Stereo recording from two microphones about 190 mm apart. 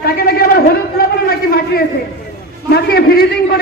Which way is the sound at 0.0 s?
55° left (ahead or behind).